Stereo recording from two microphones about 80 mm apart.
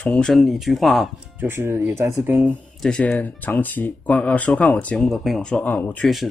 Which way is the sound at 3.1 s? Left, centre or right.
Left.